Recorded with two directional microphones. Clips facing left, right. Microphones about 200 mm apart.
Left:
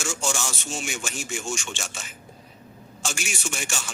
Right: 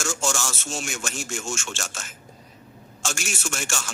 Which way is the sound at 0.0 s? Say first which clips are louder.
Right 2 dB; 5° left (ahead or behind).